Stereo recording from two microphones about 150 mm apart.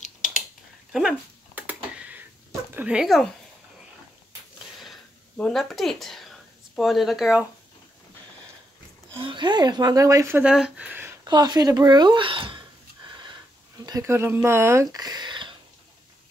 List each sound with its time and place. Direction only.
0.9 s a sound: 10° right (ahead or behind)
2.7 s speech: 10° right (ahead or behind)
5.4 s speech: centre (ahead or behind)
9.2 s speech: 30° right (ahead or behind); by 11.1 s 15° right (ahead or behind)
11.2 s speech: 25° right (ahead or behind)
13.8 s speech: 20° right (ahead or behind)